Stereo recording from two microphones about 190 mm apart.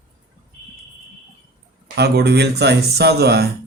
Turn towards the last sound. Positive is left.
turn(degrees=-60)  # may be behind; listen again after turning